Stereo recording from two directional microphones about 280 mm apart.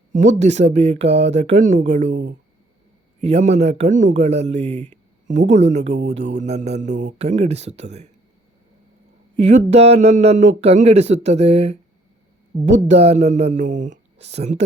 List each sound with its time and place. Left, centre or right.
0.3 s a man's voice: right
2.0 s speech: right
3.2 s a man's voice: right
9.3 s a man's voice: right